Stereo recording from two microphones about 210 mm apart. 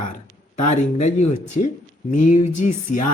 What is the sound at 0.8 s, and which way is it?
Speech, 35° left (ahead or behind).